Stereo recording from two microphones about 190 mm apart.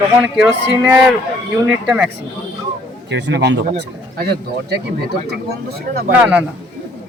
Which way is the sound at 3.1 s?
65° right (ahead or behind).